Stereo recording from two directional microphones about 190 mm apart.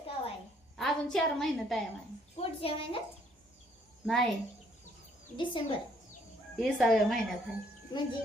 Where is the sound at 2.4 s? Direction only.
30° left (ahead or behind).